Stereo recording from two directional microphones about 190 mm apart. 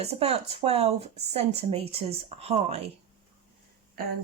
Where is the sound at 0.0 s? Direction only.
35° right (ahead or behind).